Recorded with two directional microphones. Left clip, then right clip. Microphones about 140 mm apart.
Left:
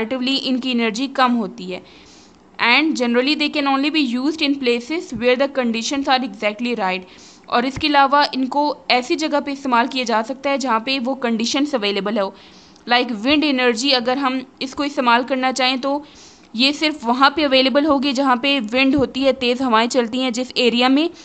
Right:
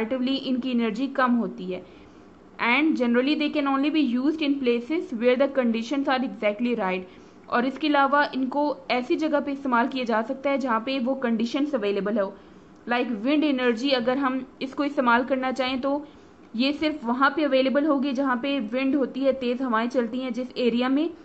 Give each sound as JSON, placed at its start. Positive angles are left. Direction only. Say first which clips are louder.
{"t": 0.0, "sound": "a woman's voice", "louder": "left 6 dB", "side_deg": 20}